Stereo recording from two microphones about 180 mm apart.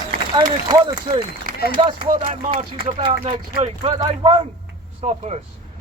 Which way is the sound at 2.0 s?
40° right (ahead or behind).